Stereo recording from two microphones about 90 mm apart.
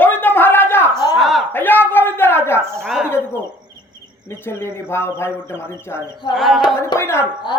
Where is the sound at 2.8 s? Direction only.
5° right (ahead or behind).